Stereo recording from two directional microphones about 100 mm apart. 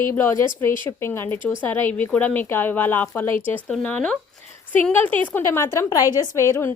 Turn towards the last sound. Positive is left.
turn(degrees=25)  # may be behind; listen again after turning